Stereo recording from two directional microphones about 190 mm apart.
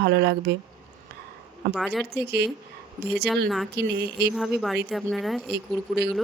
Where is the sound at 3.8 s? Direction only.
60° right (ahead or behind).